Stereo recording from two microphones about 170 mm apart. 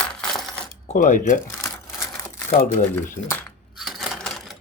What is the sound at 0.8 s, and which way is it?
Speech, 45° left (ahead or behind).